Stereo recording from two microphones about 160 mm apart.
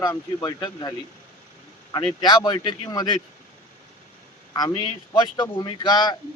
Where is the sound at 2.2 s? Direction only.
25° left (ahead or behind).